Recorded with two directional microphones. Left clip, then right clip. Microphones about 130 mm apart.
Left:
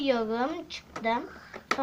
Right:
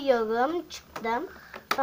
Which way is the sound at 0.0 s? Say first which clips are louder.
Right 3 dB; 45° right (ahead or behind).